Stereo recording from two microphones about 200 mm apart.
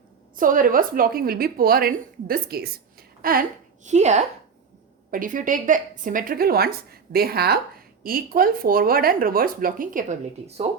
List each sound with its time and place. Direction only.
0.3 s speech: 40° right (ahead or behind)
3.8 s a woman's voice: 35° right (ahead or behind)